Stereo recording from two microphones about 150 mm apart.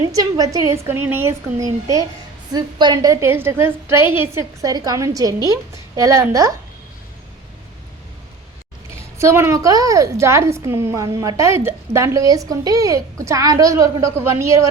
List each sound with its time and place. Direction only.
0.0 s a woman's voice: 25° right (ahead or behind)
0.9 s a woman's voice: 15° right (ahead or behind)
8.9 s a woman's voice: 15° right (ahead or behind)